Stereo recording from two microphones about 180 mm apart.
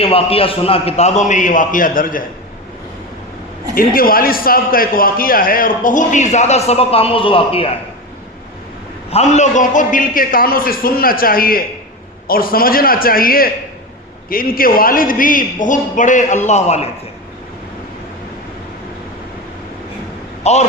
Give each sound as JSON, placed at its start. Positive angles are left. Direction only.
{"t": 0.0, "sound": "a man's voice", "side_deg": 30}
{"t": 3.8, "sound": "a man's voice", "side_deg": 55}
{"t": 9.0, "sound": "a man's voice", "side_deg": 35}
{"t": 20.4, "sound": "speech", "side_deg": 40}